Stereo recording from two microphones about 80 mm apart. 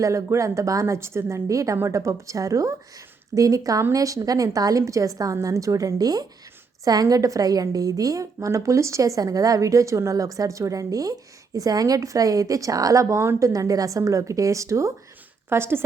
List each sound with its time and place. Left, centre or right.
0.0 s a woman's voice: right